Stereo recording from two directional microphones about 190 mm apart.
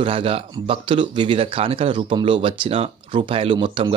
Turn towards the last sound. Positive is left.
turn(degrees=-25)  # may be behind; listen again after turning